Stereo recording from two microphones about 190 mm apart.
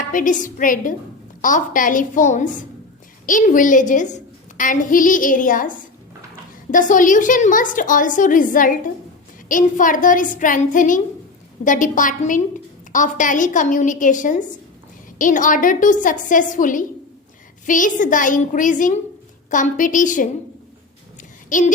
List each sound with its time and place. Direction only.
0.0 s a woman's voice: 45° left (ahead or behind)